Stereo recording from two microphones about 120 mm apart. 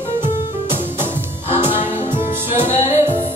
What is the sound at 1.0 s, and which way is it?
Music, 20° right (ahead or behind).